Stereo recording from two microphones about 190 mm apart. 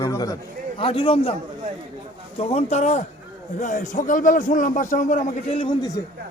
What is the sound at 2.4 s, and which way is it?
A man's voice, 35° left (ahead or behind).